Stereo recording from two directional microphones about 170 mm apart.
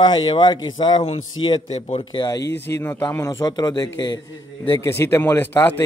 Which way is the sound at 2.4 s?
85° left.